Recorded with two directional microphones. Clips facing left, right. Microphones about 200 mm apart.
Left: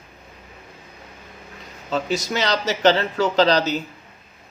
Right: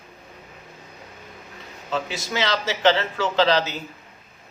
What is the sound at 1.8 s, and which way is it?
Speech, 40° left (ahead or behind).